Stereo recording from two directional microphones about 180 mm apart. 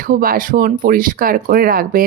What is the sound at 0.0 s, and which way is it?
Speech, 50° right (ahead or behind).